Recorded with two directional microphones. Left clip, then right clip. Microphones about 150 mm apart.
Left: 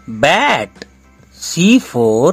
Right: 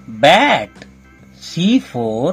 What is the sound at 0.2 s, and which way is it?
Speech, 55° left (ahead or behind).